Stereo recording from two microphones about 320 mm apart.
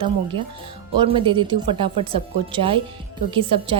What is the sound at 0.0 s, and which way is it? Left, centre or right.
A woman's voice, centre.